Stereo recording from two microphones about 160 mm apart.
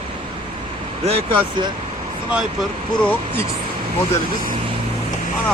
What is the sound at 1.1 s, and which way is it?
Speech, 35° right (ahead or behind).